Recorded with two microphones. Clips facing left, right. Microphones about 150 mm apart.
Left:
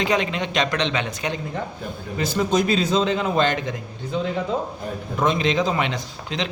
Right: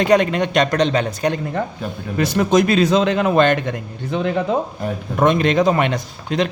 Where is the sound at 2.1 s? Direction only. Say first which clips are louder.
Right 5 dB; 65° right (ahead or behind).